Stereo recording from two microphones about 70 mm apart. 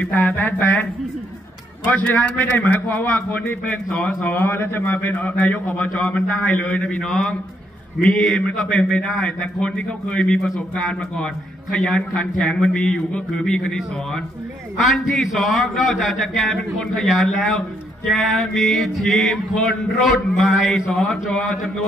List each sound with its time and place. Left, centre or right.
0.2 s a man's voice: left
2.0 s a man's voice: left
4.2 s a man's voice: left; by 10.5 s centre
11.8 s a man's voice: centre
14.8 s male singing: centre